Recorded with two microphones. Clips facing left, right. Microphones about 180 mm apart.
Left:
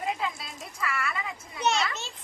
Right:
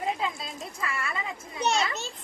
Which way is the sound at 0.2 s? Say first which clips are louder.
Right 2 dB; 25° right (ahead or behind).